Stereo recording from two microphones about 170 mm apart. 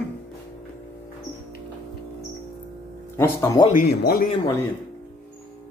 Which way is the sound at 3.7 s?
65° left (ahead or behind).